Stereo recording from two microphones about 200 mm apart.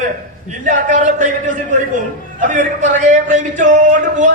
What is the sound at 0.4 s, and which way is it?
A man's voice, 40° right (ahead or behind).